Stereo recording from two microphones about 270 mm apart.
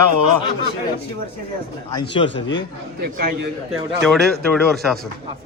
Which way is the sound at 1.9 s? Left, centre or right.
Centre.